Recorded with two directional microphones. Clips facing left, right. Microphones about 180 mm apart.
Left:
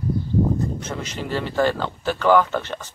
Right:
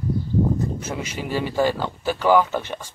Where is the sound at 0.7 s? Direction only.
10° right (ahead or behind).